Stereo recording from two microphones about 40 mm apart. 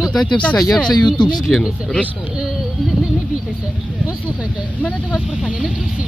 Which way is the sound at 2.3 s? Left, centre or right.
Centre.